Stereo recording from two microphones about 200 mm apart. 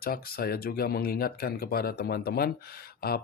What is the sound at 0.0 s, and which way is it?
Speech, 50° left (ahead or behind).